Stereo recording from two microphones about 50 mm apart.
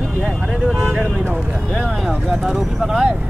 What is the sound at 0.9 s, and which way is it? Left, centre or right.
Speech, centre.